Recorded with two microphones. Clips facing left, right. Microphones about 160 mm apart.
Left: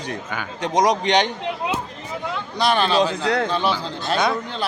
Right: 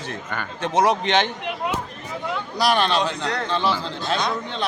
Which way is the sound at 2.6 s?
Centre (ahead or behind).